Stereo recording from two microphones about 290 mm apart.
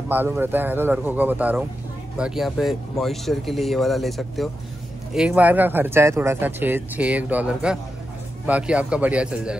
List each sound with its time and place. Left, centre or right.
0.1 s speech: centre